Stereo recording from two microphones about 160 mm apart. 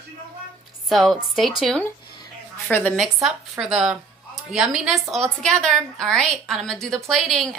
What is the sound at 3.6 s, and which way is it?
A woman's voice, 5° right (ahead or behind).